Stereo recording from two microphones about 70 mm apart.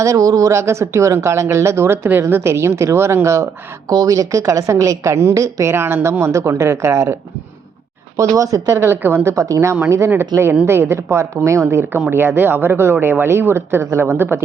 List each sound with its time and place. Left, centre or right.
0.0 s a woman's voice: right
8.8 s speech: right
9.3 s a woman's voice: right
10.7 s speech: right